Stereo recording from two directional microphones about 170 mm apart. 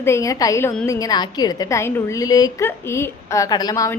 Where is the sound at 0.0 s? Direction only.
15° left (ahead or behind).